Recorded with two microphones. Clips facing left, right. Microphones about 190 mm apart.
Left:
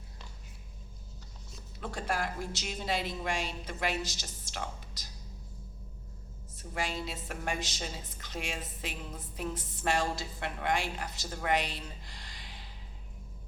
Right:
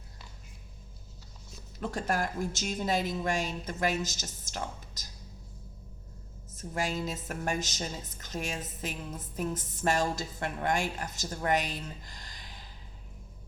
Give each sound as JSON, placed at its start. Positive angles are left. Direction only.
{"t": 1.8, "sound": "a woman's voice", "side_deg": -45}
{"t": 6.6, "sound": "a woman's voice", "side_deg": -45}